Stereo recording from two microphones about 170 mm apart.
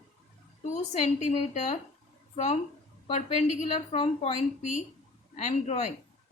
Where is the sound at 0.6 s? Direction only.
45° left (ahead or behind).